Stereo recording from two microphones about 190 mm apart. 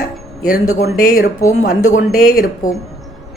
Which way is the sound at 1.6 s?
45° left (ahead or behind).